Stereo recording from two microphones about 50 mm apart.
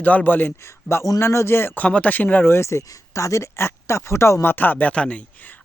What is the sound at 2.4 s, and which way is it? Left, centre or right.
Speech, left.